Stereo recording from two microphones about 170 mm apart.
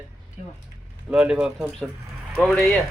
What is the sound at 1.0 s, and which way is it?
A man's voice, 5° right (ahead or behind).